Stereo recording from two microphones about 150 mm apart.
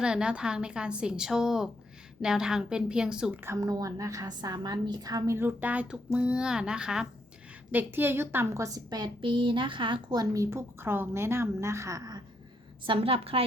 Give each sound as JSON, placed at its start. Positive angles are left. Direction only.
{"t": 0.0, "sound": "a woman's voice", "side_deg": -5}
{"t": 3.4, "sound": "a woman's voice", "side_deg": -20}
{"t": 12.8, "sound": "a woman's voice", "side_deg": -35}